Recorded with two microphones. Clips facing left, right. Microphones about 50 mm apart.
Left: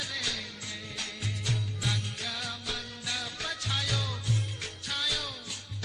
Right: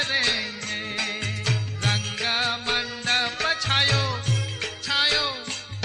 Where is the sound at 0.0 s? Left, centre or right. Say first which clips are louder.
Right 11 dB; right.